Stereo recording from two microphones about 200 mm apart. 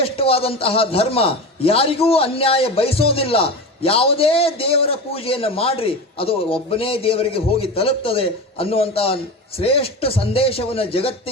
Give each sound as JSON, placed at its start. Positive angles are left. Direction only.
{"t": 0.0, "sound": "a man's voice", "side_deg": 30}